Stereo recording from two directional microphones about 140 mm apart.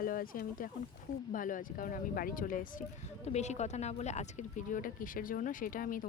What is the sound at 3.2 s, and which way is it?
Speech, 55° left (ahead or behind).